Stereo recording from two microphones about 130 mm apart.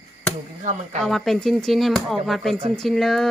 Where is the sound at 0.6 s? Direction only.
65° right (ahead or behind).